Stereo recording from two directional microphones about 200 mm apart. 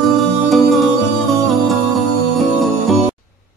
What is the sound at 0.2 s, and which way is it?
Music, centre (ahead or behind).